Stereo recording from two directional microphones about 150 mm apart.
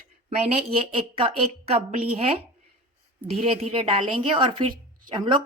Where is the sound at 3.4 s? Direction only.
40° right (ahead or behind).